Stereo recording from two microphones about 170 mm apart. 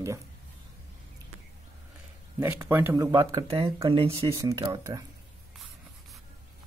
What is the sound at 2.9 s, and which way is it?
Speech, 25° right (ahead or behind).